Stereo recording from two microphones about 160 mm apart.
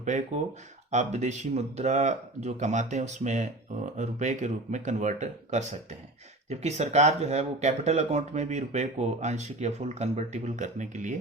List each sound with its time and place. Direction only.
0.0 s speech: 50° right (ahead or behind)